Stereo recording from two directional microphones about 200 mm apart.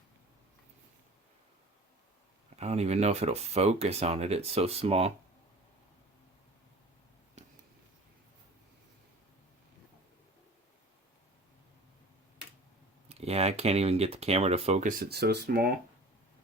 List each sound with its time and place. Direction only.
2.6 s speech: 35° right (ahead or behind)
13.1 s speech: 30° right (ahead or behind); by 15.7 s 50° right (ahead or behind)